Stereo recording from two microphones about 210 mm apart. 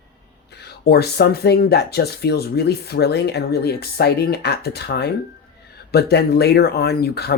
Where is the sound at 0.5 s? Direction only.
50° left (ahead or behind).